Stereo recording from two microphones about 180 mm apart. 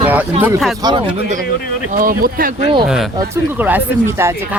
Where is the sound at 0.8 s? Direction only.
25° right (ahead or behind).